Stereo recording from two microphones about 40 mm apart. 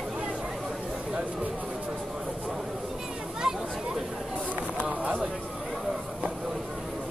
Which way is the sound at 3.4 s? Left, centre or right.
Centre.